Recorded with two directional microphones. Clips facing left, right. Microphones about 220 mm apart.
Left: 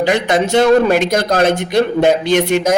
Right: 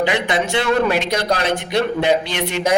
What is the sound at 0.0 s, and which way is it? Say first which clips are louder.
A man's voice: left 5 dB; 45° left (ahead or behind).